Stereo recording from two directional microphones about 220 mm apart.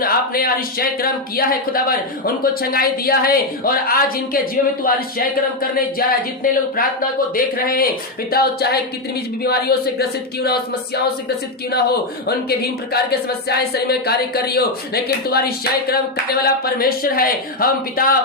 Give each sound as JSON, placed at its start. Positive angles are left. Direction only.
{"t": 0.0, "sound": "speech", "side_deg": 40}